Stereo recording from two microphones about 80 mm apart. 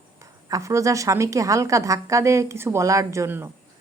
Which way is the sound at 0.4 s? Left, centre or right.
Right.